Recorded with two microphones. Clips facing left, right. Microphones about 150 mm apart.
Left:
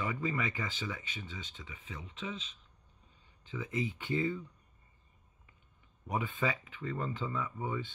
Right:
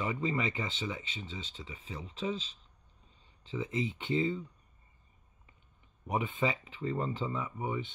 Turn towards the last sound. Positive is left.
turn(degrees=-20)  # may be behind; listen again after turning